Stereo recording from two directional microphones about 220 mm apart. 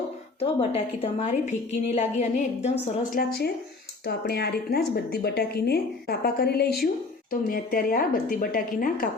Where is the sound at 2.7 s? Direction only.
45° left (ahead or behind).